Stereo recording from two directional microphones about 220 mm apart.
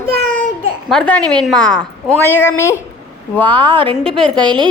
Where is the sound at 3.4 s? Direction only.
20° right (ahead or behind).